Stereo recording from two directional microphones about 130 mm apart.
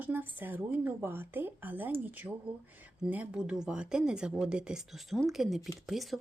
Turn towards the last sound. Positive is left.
turn(degrees=0)  # may be behind; listen again after turning